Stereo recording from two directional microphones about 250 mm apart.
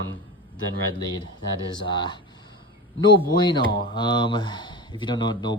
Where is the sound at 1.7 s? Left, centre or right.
Centre.